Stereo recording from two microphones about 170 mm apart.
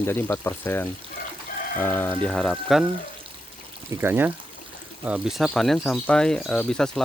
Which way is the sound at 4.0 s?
10° right (ahead or behind).